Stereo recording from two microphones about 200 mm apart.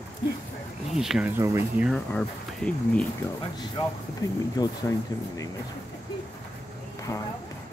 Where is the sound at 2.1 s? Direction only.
5° left (ahead or behind).